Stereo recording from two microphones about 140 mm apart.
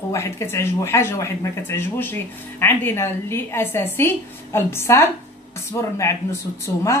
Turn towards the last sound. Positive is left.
turn(degrees=20)  # may be behind; listen again after turning